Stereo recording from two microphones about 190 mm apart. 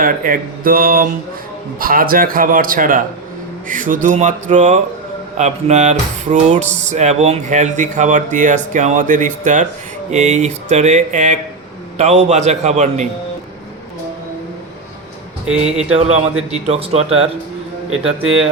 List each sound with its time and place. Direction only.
0.0 s a man's voice: 50° right (ahead or behind)
15.4 s a man's voice: 5° right (ahead or behind)
15.9 s speech: 35° right (ahead or behind)
17.9 s a man's voice: 5° right (ahead or behind)